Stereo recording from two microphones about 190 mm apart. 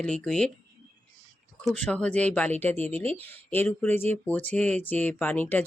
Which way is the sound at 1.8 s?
5° left (ahead or behind).